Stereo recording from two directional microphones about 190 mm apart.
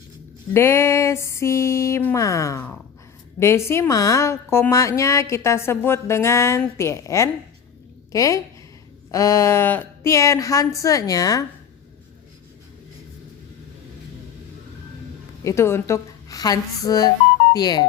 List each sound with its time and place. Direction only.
0.5 s a woman's voice: 15° left (ahead or behind)
15.4 s a woman's voice: 15° left (ahead or behind)